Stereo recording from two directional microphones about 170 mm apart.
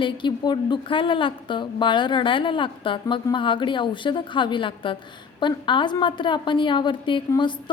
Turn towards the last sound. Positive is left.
turn(degrees=30)  # may be behind; listen again after turning